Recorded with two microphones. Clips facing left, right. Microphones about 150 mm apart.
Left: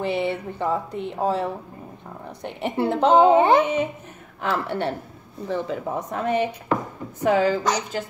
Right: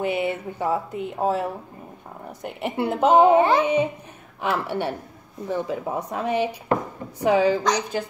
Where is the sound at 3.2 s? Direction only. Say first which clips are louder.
Left 1 dB; 25° left (ahead or behind).